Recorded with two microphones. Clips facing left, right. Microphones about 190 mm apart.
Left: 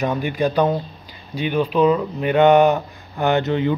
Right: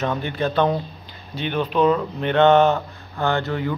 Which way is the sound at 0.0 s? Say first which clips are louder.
Left 3 dB; 15° left (ahead or behind).